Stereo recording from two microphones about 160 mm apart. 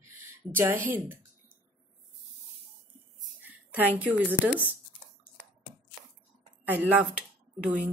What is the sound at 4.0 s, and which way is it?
Speech, 10° right (ahead or behind).